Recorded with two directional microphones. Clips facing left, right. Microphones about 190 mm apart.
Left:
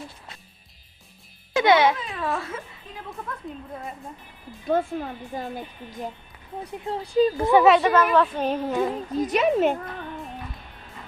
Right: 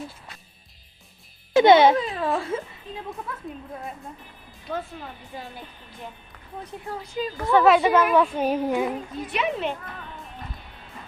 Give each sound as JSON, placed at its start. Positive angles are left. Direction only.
{"t": 1.5, "sound": "a woman's voice", "side_deg": -25}
{"t": 3.3, "sound": "speech", "side_deg": -5}
{"t": 4.7, "sound": "a woman's voice", "side_deg": 50}
{"t": 6.7, "sound": "speech", "side_deg": 20}
{"t": 7.6, "sound": "a woman's voice", "side_deg": 0}
{"t": 9.1, "sound": "a woman's voice", "side_deg": 40}